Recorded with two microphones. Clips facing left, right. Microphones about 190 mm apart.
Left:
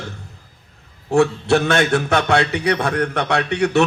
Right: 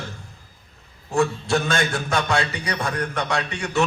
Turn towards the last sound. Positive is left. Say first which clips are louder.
# left 7 dB
turn(degrees=65)  # may be behind; listen again after turning